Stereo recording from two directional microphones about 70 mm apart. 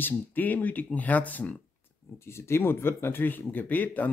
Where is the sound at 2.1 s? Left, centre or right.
Left.